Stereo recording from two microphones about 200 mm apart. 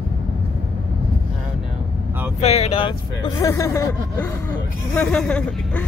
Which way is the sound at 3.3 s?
15° left (ahead or behind).